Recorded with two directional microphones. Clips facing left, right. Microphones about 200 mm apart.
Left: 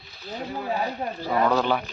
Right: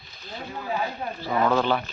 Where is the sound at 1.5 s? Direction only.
10° left (ahead or behind).